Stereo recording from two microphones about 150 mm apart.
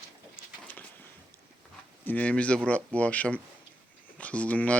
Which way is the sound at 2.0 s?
10° left (ahead or behind).